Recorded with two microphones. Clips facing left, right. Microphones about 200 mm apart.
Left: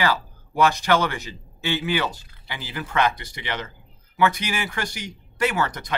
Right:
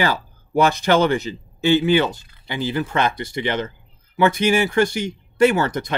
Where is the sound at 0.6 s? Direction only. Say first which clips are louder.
Right 4 dB; 25° right (ahead or behind).